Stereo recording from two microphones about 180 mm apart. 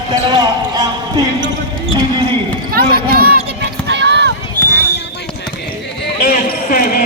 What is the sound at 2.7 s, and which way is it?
Run, 55° right (ahead or behind).